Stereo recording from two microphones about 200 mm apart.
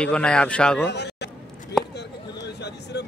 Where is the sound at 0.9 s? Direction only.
55° left (ahead or behind).